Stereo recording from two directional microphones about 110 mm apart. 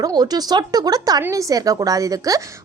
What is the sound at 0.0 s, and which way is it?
A woman's voice, 35° right (ahead or behind).